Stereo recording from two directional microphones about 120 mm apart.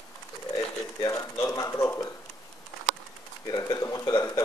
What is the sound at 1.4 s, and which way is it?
Speech, 25° left (ahead or behind).